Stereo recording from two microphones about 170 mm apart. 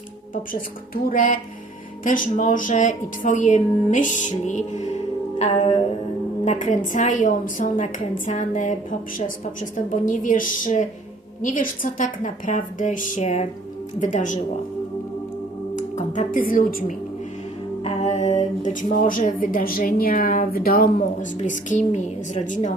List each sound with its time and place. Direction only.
1.0 s a woman's voice: 50° left (ahead or behind)
5.4 s music: 45° left (ahead or behind)
6.4 s a woman's voice: 45° left (ahead or behind)
15.7 s music: 50° left (ahead or behind)
17.8 s a woman's voice: 40° left (ahead or behind)